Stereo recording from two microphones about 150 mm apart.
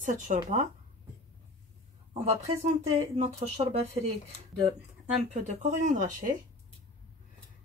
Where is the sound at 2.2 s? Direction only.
45° right (ahead or behind).